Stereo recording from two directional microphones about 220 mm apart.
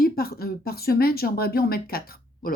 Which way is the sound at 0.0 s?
45° left (ahead or behind).